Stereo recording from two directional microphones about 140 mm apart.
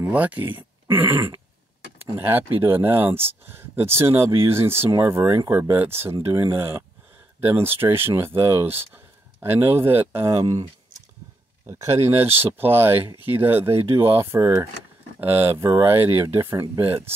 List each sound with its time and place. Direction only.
0.0 s speech: 10° right (ahead or behind)
11.6 s speech: 20° right (ahead or behind)